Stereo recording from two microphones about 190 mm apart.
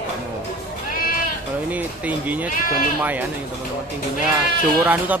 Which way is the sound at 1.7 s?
10° right (ahead or behind).